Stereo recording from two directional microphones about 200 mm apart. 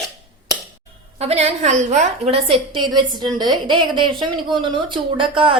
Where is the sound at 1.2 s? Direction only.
30° right (ahead or behind).